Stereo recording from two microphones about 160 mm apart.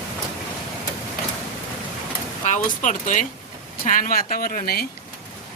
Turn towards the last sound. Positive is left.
turn(degrees=65)  # may be behind; listen again after turning